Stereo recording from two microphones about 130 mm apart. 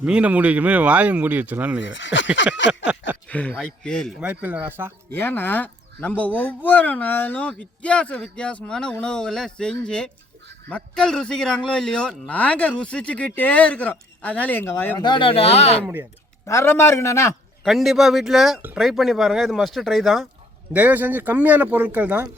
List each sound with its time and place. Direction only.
0.0 s speech: 10° right (ahead or behind)
3.2 s speech: 10° left (ahead or behind)
4.2 s speech: 10° right (ahead or behind)
5.1 s speech: 15° left (ahead or behind)
14.9 s speech: 35° left (ahead or behind); by 15.8 s 55° left (ahead or behind)
16.5 s a man's voice: 20° left (ahead or behind)
17.6 s speech: centre (ahead or behind)
20.7 s speech: 15° right (ahead or behind)